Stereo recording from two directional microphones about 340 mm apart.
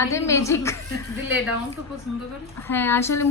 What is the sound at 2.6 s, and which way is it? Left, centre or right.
Speech, centre.